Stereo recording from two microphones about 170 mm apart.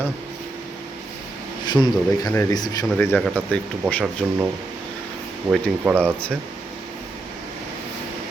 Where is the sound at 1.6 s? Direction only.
25° left (ahead or behind).